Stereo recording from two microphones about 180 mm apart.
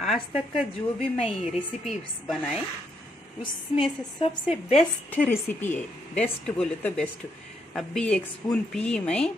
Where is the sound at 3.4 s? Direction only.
25° left (ahead or behind).